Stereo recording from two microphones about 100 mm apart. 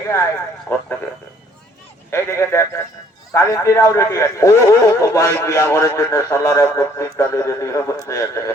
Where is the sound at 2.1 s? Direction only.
30° left (ahead or behind).